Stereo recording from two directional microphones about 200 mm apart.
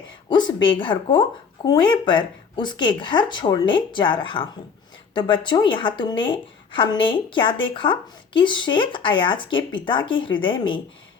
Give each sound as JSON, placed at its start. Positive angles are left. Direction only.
{"t": 0.3, "sound": "speech", "side_deg": 20}